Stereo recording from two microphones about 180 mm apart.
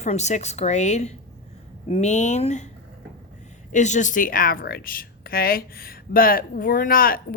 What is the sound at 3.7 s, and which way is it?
A woman's voice, 45° left (ahead or behind).